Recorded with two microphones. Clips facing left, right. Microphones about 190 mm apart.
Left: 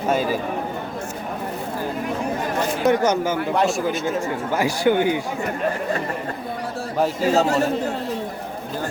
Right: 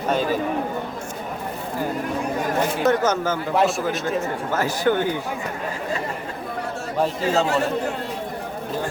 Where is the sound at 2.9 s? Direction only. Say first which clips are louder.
Left 3 dB; 15° left (ahead or behind).